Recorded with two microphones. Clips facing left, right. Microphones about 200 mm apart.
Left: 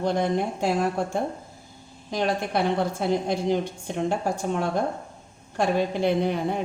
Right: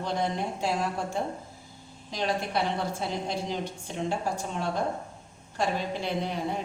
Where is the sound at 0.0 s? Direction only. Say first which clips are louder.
Left 6 dB; 55° left (ahead or behind).